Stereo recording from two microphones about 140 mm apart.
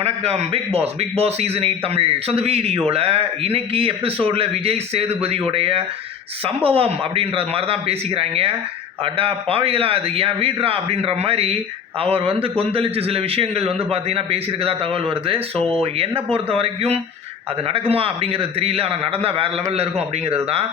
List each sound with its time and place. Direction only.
0.0 s a man's voice: 45° right (ahead or behind)